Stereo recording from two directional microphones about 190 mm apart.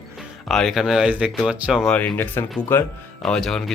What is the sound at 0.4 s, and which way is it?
Speech, centre (ahead or behind).